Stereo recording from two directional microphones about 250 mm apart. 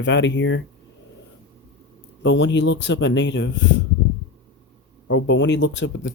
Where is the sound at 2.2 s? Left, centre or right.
Left.